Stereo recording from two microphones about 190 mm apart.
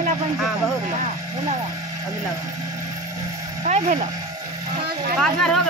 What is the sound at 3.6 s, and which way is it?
Speech, 40° right (ahead or behind).